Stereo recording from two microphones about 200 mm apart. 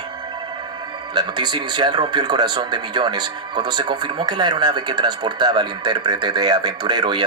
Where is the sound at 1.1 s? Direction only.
20° right (ahead or behind).